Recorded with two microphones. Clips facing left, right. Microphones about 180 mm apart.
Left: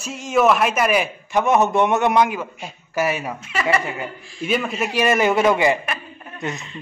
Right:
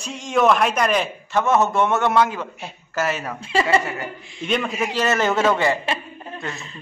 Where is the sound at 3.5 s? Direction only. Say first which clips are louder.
Right 2 dB; 30° right (ahead or behind).